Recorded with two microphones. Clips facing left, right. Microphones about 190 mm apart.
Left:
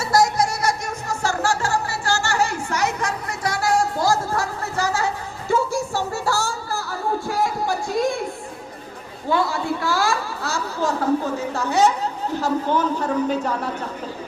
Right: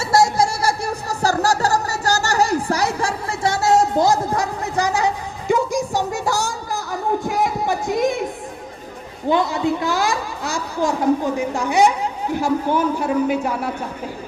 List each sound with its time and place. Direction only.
0.0 s music: 25° right (ahead or behind)
6.9 s a sound: 20° right (ahead or behind)
9.3 s speech: 20° right (ahead or behind)